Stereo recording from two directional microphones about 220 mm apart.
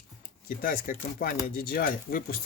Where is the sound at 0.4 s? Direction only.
40° left (ahead or behind).